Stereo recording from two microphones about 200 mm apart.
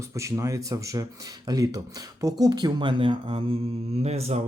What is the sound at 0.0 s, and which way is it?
Speech, 15° right (ahead or behind).